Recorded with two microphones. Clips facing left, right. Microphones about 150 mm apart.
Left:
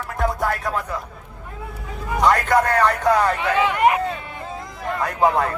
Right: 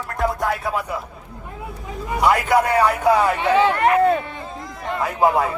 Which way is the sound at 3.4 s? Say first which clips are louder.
Right 3 dB; 30° right (ahead or behind).